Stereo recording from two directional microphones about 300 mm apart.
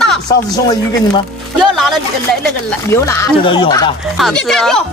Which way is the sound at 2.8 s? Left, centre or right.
Centre.